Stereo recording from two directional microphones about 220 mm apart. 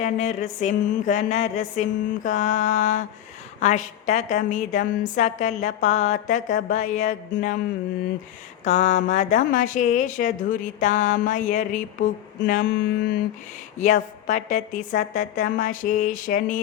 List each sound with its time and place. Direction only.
0.0 s a woman's voice: 30° left (ahead or behind)
8.6 s a woman's voice: 35° left (ahead or behind)